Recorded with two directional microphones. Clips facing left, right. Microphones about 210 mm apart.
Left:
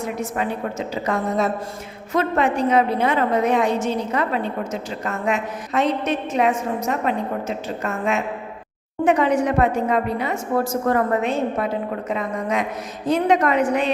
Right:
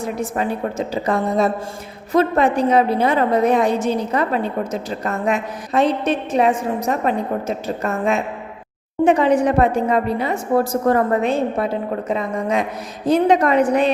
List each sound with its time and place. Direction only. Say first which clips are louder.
0.2 s a woman's voice: right 3 dB; 35° right (ahead or behind)